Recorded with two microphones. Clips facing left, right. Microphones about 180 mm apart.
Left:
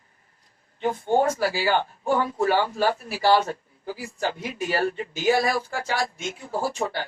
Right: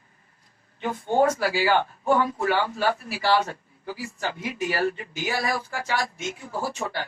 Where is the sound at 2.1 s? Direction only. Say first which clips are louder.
Left 2 dB; 40° left (ahead or behind).